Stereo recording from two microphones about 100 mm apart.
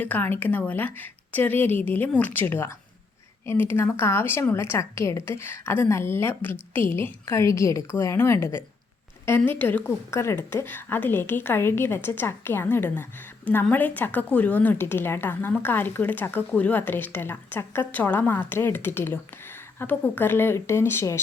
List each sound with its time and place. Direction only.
0.0 s speech: 15° left (ahead or behind)